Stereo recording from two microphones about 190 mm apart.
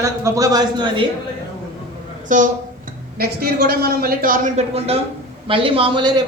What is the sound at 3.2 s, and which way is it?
A man's voice, 55° right (ahead or behind).